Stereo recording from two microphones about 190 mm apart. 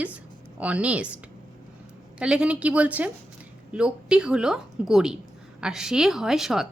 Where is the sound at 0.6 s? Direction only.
5° right (ahead or behind).